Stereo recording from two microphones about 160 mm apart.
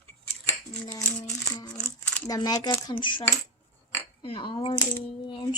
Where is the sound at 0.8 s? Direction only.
15° left (ahead or behind).